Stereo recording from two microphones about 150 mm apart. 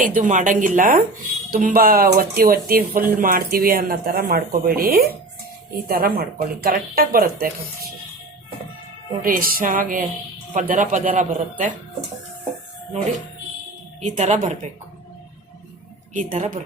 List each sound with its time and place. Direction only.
0.0 s speech: 60° right (ahead or behind); by 7.5 s 75° right (ahead or behind)
9.2 s speech: 70° right (ahead or behind)
10.5 s speech: 55° right (ahead or behind)
14.0 s speech: 55° right (ahead or behind)
16.1 s speech: 60° right (ahead or behind)